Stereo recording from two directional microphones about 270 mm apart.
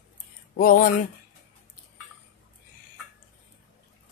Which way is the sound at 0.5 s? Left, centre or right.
Left.